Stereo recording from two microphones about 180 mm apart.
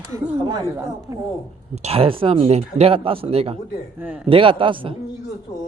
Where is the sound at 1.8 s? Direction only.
35° right (ahead or behind).